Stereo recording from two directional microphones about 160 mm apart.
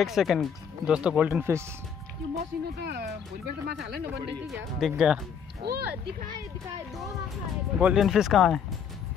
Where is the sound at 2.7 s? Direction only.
80° right.